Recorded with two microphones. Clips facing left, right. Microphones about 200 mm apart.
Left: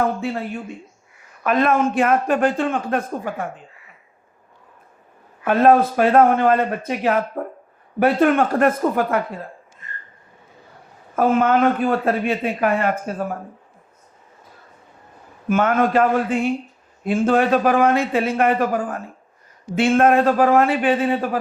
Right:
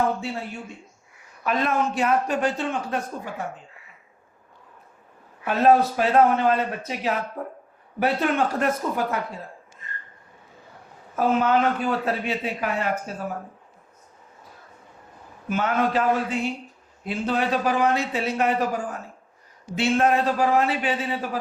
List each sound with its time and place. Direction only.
0.2 s a man's voice: 55° left (ahead or behind)
5.5 s a man's voice: 55° left (ahead or behind)
11.1 s a man's voice: 50° left (ahead or behind)
15.4 s a man's voice: 50° left (ahead or behind)